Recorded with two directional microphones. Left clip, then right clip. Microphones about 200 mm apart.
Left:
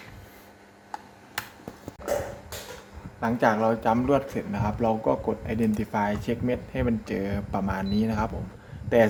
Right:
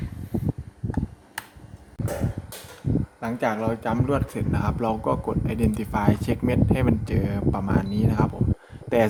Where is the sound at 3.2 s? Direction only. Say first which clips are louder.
Left 4 dB; 10° right (ahead or behind).